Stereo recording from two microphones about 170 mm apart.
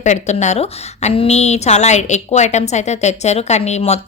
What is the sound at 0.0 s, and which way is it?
A woman's voice, 45° left (ahead or behind).